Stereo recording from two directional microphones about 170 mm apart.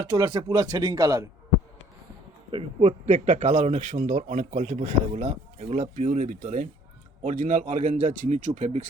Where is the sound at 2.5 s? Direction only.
35° right (ahead or behind).